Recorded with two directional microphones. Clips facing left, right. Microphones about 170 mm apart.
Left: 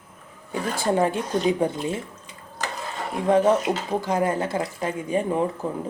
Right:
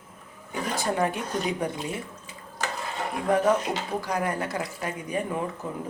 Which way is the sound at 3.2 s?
25° left (ahead or behind).